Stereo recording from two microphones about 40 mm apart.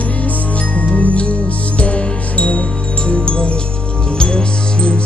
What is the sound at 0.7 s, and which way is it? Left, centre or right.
Music, left.